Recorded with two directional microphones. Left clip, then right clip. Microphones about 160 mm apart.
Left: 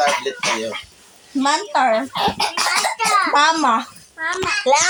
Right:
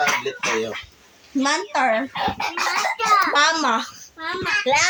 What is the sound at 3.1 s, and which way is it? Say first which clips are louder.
Speech: left 2 dB; 5° right (ahead or behind).